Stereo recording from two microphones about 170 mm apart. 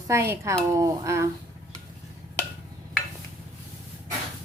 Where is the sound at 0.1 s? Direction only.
15° right (ahead or behind).